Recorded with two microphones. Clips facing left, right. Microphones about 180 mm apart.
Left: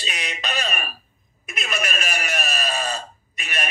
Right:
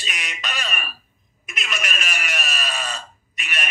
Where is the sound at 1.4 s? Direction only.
35° left (ahead or behind).